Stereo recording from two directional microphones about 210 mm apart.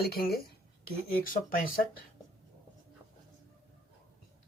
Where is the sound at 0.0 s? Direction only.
45° left (ahead or behind).